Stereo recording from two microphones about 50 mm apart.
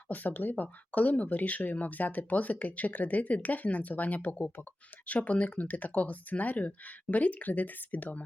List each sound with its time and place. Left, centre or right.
0.1 s speech: left